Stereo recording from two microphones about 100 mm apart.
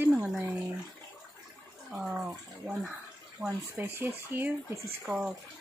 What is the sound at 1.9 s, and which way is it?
Speech, 5° right (ahead or behind).